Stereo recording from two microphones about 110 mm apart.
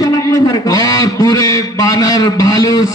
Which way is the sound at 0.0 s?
35° left (ahead or behind).